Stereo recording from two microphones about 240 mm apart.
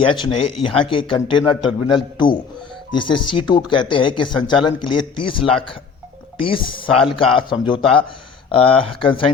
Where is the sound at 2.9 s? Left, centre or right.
Left.